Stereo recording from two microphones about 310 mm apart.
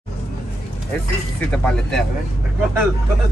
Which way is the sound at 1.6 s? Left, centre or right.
Centre.